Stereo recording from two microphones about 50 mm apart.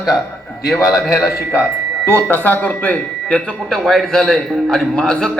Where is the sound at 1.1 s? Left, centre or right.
Left.